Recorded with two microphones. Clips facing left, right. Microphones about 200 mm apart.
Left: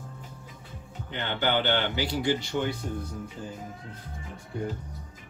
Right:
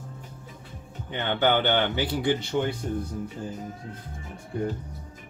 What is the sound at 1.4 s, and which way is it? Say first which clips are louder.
Speech: right 3 dB; 55° right (ahead or behind).